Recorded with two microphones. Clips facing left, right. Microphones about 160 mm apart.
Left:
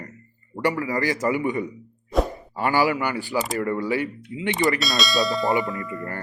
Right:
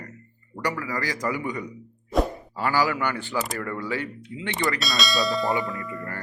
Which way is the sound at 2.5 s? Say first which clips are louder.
Left 5 dB; 15° left (ahead or behind).